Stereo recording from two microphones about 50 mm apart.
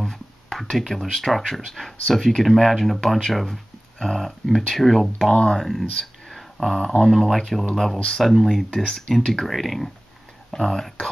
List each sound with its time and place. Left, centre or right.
0.0 s speech: centre
5.3 s speech: centre
5.6 s speech: centre
5.9 s a sound: centre
7.1 s speech: centre